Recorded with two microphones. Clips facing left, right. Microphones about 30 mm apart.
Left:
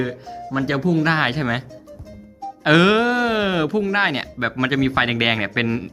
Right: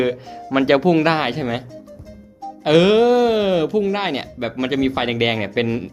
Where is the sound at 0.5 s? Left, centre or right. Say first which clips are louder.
Right 5 dB; right.